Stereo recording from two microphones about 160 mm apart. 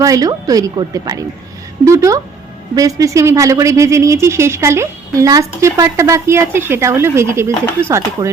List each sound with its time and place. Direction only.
0.0 s a woman's voice: 20° right (ahead or behind)